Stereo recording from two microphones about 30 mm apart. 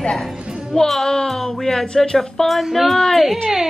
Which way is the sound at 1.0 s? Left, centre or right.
Centre.